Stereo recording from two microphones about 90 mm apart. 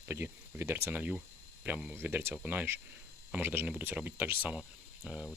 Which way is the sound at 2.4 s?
20° right (ahead or behind).